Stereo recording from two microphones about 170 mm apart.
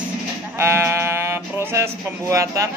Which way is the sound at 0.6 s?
15° right (ahead or behind).